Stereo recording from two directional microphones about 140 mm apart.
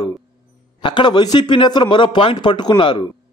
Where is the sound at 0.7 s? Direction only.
35° left (ahead or behind).